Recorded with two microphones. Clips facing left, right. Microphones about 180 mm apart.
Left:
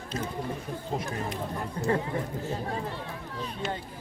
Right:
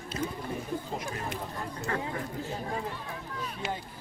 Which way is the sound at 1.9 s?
30° left (ahead or behind).